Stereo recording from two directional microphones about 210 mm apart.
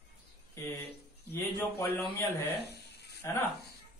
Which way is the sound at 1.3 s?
10° left (ahead or behind).